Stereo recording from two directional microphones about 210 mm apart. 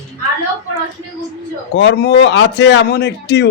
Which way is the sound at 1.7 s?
55° left (ahead or behind).